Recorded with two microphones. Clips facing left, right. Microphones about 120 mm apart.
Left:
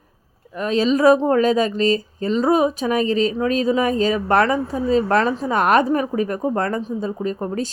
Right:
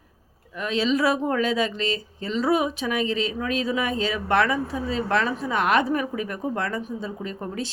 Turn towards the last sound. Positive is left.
turn(degrees=40)  # may be behind; listen again after turning